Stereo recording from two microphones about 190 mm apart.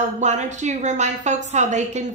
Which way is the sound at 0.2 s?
40° right (ahead or behind).